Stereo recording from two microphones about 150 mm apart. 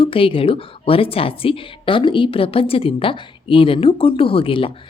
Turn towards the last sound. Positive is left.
turn(degrees=35)  # may be behind; listen again after turning